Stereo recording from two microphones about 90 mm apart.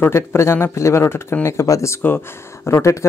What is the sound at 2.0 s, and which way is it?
Speech, 20° left (ahead or behind).